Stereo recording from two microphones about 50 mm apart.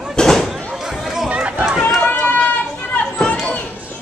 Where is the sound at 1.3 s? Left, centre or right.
Right.